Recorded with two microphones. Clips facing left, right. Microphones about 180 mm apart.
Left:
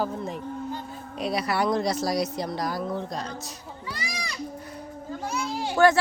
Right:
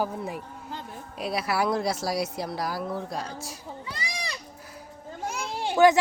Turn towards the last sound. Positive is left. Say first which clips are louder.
# right 1 dB
turn(degrees=-20)  # may be behind; listen again after turning